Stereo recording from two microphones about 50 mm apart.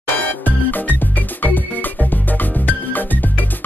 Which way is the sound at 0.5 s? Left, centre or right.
Left.